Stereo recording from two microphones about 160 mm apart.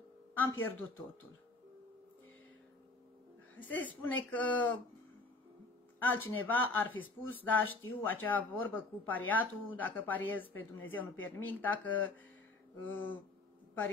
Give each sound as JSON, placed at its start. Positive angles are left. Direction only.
{"t": 0.5, "sound": "speech", "side_deg": 15}
{"t": 3.5, "sound": "speech", "side_deg": 10}
{"t": 6.0, "sound": "speech", "side_deg": 10}